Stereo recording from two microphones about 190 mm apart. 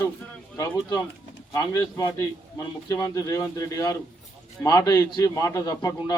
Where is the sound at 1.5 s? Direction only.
15° left (ahead or behind).